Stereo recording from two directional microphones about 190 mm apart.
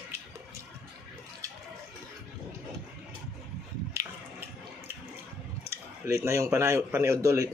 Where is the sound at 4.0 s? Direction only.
15° right (ahead or behind).